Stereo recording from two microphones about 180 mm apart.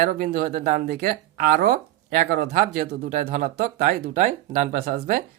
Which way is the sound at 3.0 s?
40° right (ahead or behind).